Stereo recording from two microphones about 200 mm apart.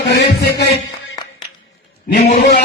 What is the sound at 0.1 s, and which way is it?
Music, 55° left (ahead or behind).